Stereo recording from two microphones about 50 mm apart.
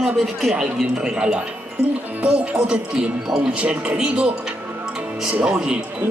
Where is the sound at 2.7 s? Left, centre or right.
Centre.